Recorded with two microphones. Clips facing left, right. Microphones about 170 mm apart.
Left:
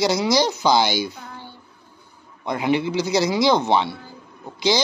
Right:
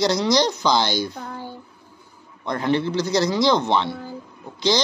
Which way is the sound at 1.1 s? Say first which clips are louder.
Right 6 dB; 40° right (ahead or behind).